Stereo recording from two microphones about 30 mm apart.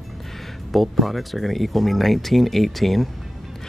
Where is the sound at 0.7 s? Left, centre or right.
Centre.